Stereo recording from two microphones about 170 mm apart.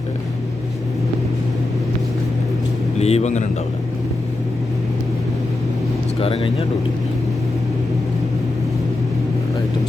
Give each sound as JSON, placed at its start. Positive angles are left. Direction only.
{"t": 3.0, "sound": "a man's voice", "side_deg": 40}
{"t": 6.1, "sound": "a man's voice", "side_deg": 35}